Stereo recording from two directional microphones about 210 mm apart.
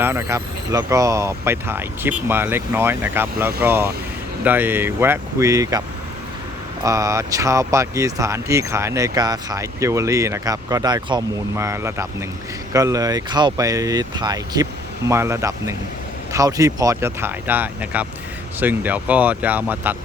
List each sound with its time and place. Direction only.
0.0 s speech: 10° right (ahead or behind)
6.8 s speech: 15° right (ahead or behind)